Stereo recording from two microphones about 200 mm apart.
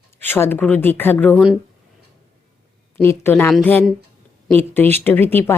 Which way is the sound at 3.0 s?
10° left (ahead or behind).